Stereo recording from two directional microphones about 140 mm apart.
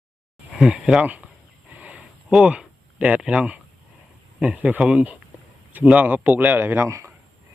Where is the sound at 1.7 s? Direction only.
10° right (ahead or behind).